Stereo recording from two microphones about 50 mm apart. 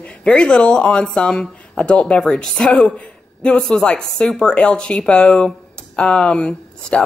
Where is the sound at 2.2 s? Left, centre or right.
Centre.